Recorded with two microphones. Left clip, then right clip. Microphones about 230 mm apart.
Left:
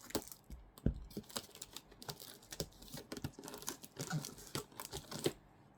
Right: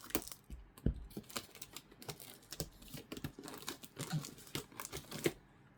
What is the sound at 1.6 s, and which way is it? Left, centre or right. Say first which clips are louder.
Typing: left 1 dB; right.